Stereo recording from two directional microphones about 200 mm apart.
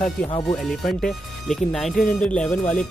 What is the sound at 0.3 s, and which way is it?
Speech, 20° left (ahead or behind).